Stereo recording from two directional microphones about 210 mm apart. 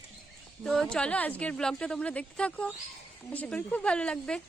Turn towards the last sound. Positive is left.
turn(degrees=5)  # may be behind; listen again after turning